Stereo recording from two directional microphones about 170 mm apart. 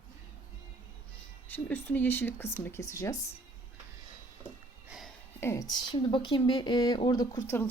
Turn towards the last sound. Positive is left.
turn(degrees=20)  # may be behind; listen again after turning